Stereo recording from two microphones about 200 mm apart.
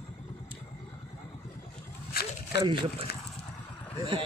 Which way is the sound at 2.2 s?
50° left (ahead or behind).